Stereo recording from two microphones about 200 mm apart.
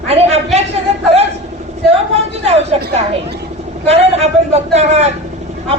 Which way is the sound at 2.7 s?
30° right (ahead or behind).